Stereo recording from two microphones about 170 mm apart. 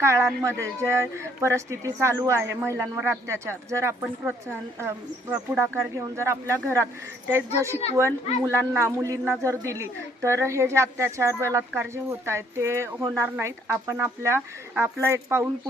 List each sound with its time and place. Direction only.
0.0 s a man's voice: 15° right (ahead or behind)